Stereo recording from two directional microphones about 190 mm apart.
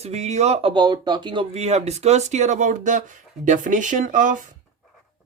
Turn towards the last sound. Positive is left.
turn(degrees=-45)  # may be behind; listen again after turning